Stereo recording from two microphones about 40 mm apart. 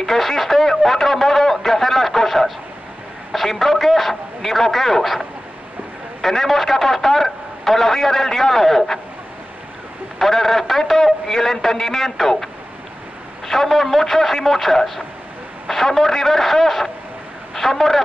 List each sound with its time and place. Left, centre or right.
0.0 s a sound: centre
3.3 s a man's voice: centre
6.2 s speech: centre
10.1 s speech: centre
13.5 s speech: centre